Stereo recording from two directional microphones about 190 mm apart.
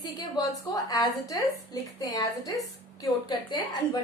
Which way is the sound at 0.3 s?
20° left (ahead or behind).